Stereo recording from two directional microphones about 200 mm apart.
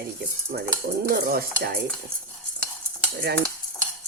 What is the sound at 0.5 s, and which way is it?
Speech, 50° right (ahead or behind).